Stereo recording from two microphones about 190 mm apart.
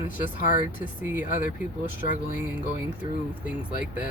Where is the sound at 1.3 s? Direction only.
45° left (ahead or behind).